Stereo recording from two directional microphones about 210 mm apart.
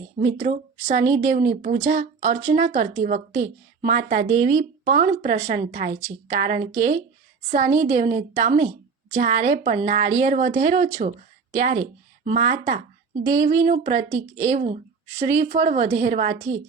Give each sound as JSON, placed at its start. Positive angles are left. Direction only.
{"t": 0.3, "sound": "a woman's voice", "side_deg": -35}
{"t": 1.0, "sound": "a woman's voice", "side_deg": -15}
{"t": 1.3, "sound": "a woman's voice", "side_deg": -35}
{"t": 14.1, "sound": "a woman's voice", "side_deg": -15}
{"t": 14.5, "sound": "a woman's voice", "side_deg": -35}